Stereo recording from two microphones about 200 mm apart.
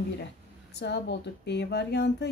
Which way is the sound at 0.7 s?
60° left (ahead or behind).